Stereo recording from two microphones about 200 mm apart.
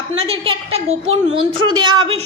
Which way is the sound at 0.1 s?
30° right (ahead or behind).